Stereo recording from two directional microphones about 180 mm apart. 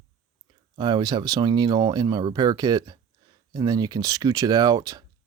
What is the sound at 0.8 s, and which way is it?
Speech, 25° right (ahead or behind).